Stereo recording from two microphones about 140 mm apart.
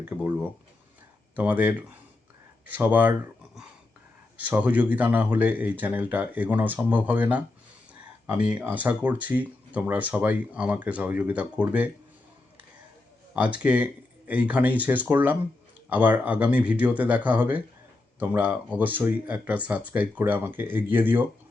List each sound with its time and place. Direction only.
0.1 s speech: 15° right (ahead or behind)
1.4 s speech: 10° right (ahead or behind)
13.3 s speech: 10° right (ahead or behind)